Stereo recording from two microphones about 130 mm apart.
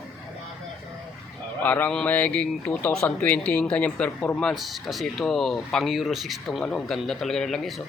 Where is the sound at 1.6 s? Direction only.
10° left (ahead or behind).